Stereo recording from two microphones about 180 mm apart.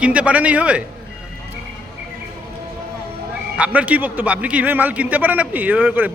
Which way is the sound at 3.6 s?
10° right (ahead or behind).